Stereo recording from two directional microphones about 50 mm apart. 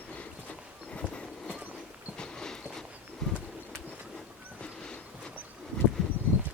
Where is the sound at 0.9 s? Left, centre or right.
Left.